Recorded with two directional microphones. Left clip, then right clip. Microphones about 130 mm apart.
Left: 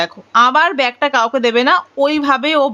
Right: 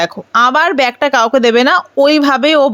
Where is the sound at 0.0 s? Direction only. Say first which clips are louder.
Right 1 dB; 50° right (ahead or behind).